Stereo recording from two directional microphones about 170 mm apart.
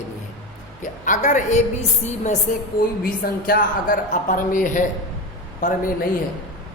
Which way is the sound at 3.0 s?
55° left (ahead or behind).